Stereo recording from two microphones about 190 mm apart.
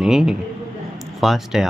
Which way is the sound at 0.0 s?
Centre (ahead or behind).